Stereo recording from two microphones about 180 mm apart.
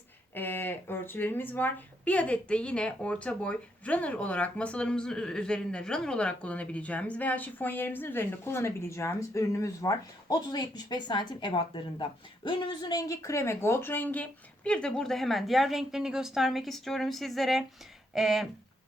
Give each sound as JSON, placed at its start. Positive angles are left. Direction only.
{"t": 0.3, "sound": "a woman's voice", "side_deg": 10}